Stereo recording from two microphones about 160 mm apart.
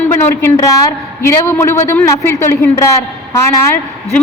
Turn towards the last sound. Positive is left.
turn(degrees=15)  # may be behind; listen again after turning